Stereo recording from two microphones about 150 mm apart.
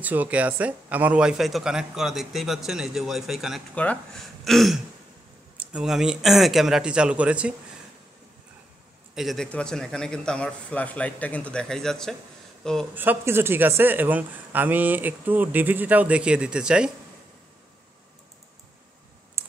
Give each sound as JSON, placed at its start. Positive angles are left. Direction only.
{"t": 0.0, "sound": "a man's voice", "side_deg": -10}
{"t": 3.7, "sound": "a man's voice", "side_deg": 10}
{"t": 9.1, "sound": "a man's voice", "side_deg": 0}
{"t": 12.9, "sound": "speech", "side_deg": -15}
{"t": 19.4, "sound": "computer keyboard", "side_deg": -15}